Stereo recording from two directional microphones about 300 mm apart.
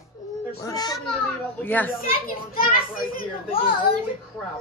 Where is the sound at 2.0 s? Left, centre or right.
Left.